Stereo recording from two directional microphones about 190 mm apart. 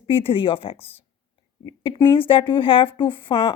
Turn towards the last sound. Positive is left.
turn(degrees=30)  # may be behind; listen again after turning